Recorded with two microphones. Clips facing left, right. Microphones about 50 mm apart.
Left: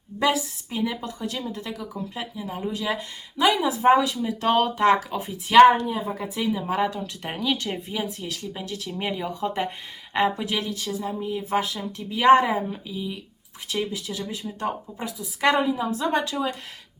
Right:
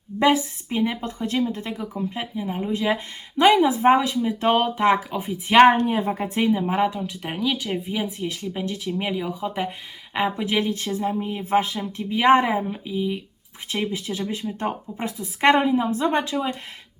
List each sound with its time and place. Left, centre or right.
0.2 s a woman's voice: right
5.7 s speech: right
6.5 s a woman's voice: right
7.2 s speech: centre
7.9 s a woman's voice: centre
9.0 s speech: centre
10.3 s a woman's voice: right